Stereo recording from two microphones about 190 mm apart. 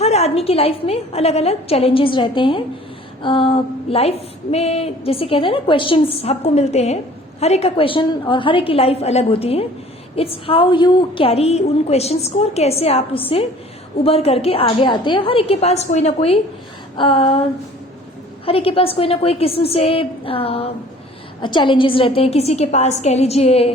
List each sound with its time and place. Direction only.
0.0 s a woman's voice: 35° left (ahead or behind)
18.4 s a woman's voice: 30° left (ahead or behind)